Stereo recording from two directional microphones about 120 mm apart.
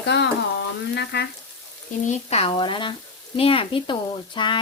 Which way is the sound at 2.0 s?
60° left (ahead or behind).